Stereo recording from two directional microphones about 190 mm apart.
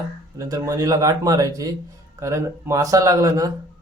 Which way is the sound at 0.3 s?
20° right (ahead or behind).